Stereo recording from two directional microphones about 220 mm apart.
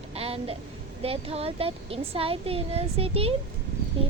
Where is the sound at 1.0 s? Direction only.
25° right (ahead or behind).